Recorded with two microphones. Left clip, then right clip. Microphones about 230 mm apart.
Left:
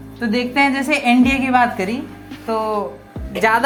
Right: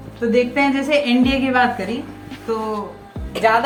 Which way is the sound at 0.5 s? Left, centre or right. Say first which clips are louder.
Left 1 dB; left.